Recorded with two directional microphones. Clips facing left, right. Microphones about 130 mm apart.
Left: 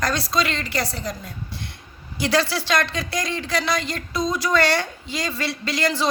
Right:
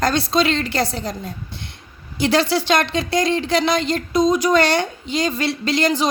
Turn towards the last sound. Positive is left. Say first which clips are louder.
# right 4 dB
turn(degrees=-20)  # may be behind; listen again after turning